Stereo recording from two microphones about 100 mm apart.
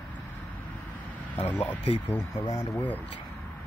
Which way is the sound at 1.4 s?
15° left (ahead or behind).